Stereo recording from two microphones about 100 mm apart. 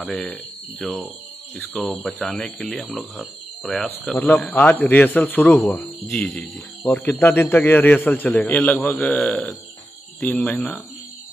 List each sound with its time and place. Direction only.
0.0 s a man's voice: 5° left (ahead or behind)
6.9 s a man's voice: 20° left (ahead or behind)
10.3 s speech: 5° left (ahead or behind)